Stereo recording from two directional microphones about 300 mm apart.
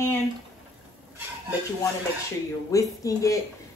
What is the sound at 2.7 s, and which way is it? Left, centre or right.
Speech, centre.